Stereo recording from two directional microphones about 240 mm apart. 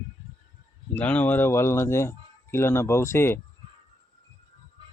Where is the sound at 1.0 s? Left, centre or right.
Centre.